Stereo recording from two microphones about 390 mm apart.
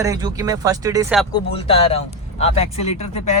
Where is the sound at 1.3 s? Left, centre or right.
Centre.